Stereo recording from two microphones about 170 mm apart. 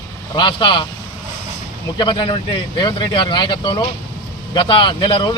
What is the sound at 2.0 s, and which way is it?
A man's voice, 25° left (ahead or behind).